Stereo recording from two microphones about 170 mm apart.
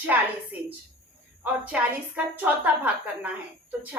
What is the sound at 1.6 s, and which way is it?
A woman's voice, 10° right (ahead or behind).